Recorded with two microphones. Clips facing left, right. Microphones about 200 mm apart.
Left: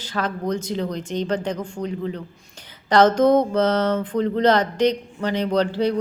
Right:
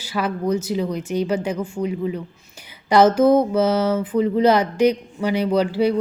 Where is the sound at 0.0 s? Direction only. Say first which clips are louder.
Right 2 dB; 10° right (ahead or behind).